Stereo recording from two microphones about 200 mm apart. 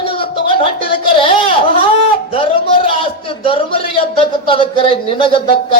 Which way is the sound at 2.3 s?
25° left (ahead or behind).